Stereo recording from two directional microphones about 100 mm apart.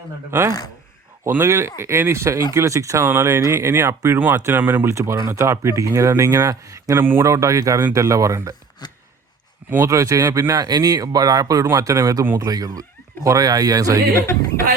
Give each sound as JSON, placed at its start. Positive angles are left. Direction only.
{"t": 0.3, "sound": "speech", "side_deg": -25}
{"t": 8.8, "sound": "a sound", "side_deg": 45}
{"t": 9.6, "sound": "speech", "side_deg": -20}
{"t": 9.9, "sound": "speech", "side_deg": -30}
{"t": 12.4, "sound": "speech", "side_deg": -40}
{"t": 14.2, "sound": "a man's voice", "side_deg": 30}